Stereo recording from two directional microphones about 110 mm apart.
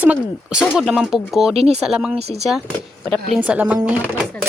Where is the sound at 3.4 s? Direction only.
15° right (ahead or behind).